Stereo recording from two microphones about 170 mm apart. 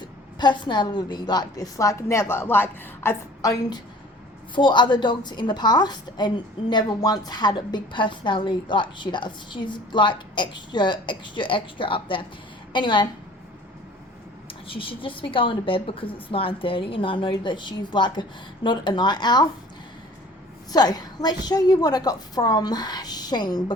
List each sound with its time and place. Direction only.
0.0 s a woman's voice: 25° left (ahead or behind)
14.7 s a woman's voice: 30° left (ahead or behind)
20.7 s a woman's voice: 25° left (ahead or behind)